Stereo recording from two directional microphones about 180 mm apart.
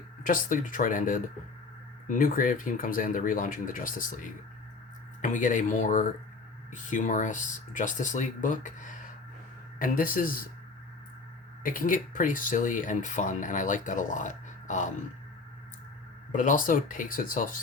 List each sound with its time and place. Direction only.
0.3 s speech: 50° left (ahead or behind)
11.6 s speech: 50° left (ahead or behind)
16.3 s speech: 45° left (ahead or behind)